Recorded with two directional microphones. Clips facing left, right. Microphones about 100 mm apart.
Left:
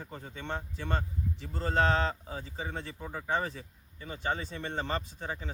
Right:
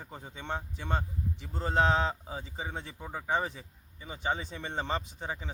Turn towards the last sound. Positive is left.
turn(degrees=-15)  # may be behind; listen again after turning